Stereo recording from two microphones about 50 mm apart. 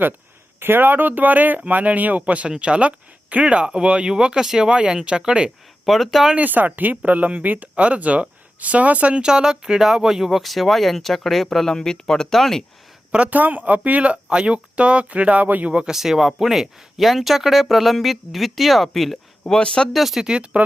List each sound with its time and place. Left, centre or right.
0.6 s speech: right
5.8 s speech: centre
6.3 s speech: right; by 12.6 s centre
13.1 s speech: right
13.4 s speech: right
15.7 s speech: centre
16.0 s speech: centre
19.5 s speech: centre
19.9 s speech: centre
20.2 s speech: centre